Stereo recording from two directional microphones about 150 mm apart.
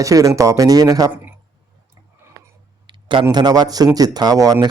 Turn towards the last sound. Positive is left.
turn(degrees=-25)  # may be behind; listen again after turning